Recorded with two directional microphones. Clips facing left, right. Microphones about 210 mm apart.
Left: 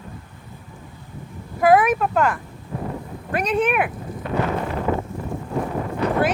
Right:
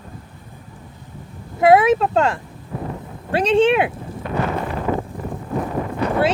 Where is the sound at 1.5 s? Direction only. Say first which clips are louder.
Right 3 dB; 25° right (ahead or behind).